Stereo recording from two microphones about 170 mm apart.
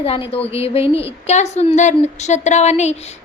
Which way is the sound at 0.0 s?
35° left (ahead or behind).